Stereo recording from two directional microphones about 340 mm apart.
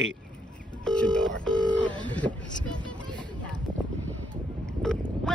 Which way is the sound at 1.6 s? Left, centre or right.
Centre.